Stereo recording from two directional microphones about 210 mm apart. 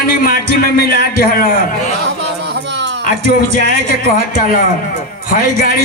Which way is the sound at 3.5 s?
40° left (ahead or behind).